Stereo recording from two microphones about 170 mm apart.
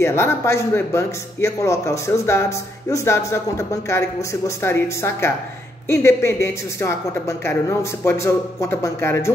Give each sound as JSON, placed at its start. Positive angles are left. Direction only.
{"t": 0.0, "sound": "speech", "side_deg": 15}